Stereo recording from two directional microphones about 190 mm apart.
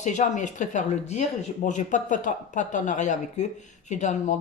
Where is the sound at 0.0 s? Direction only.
40° left (ahead or behind).